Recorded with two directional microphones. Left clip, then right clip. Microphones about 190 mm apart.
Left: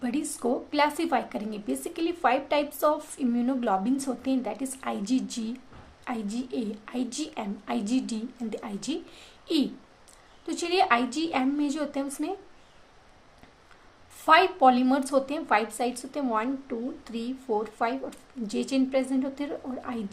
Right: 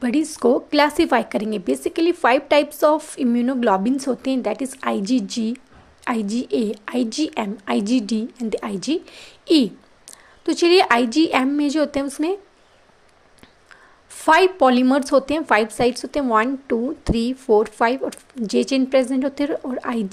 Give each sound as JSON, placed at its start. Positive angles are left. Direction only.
{"t": 0.0, "sound": "a woman's voice", "side_deg": -30}
{"t": 14.3, "sound": "a woman's voice", "side_deg": -35}